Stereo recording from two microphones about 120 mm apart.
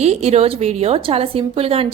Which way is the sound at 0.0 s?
65° right (ahead or behind).